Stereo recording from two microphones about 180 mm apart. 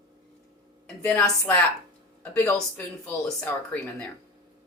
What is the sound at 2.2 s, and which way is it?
Speech, 10° left (ahead or behind).